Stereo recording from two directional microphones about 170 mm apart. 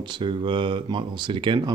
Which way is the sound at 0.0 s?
30° right (ahead or behind).